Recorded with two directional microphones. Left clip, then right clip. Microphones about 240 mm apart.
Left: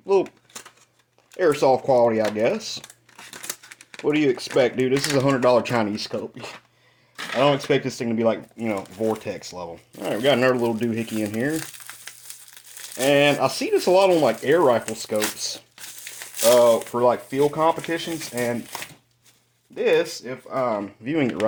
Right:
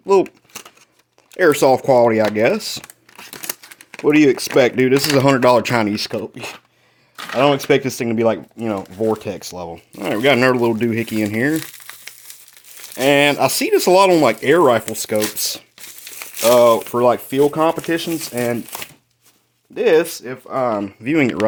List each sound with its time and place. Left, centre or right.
0.0 s speech: right
1.4 s speech: right
2.8 s a sound: right
4.0 s speech: right
13.0 s speech: right
19.7 s speech: right